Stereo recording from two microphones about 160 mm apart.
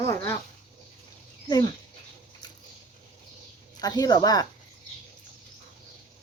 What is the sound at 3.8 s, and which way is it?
Speech, 25° left (ahead or behind).